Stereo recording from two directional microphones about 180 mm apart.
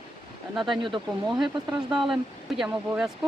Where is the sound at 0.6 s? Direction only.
25° right (ahead or behind).